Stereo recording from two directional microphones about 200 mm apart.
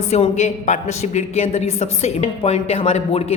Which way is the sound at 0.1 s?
35° left (ahead or behind).